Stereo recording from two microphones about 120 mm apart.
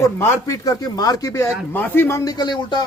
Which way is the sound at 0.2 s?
25° left (ahead or behind).